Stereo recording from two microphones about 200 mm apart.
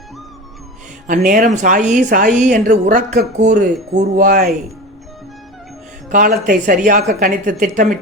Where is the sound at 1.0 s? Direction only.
45° right (ahead or behind).